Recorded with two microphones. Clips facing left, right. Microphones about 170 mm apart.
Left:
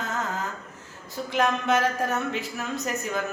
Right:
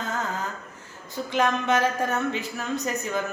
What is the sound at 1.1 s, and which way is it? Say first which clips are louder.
A woman's voice: right 1 dB; centre (ahead or behind).